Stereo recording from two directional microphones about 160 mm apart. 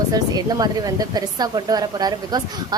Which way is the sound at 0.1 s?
25° right (ahead or behind).